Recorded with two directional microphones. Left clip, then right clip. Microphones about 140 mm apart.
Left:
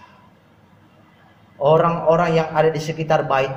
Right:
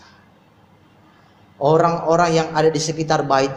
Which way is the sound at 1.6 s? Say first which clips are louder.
Even; 50° right (ahead or behind).